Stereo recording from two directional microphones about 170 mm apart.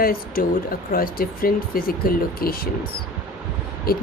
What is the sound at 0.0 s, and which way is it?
Speech, 60° left (ahead or behind).